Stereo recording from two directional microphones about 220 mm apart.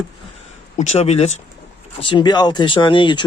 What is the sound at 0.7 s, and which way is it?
Speech, 30° left (ahead or behind).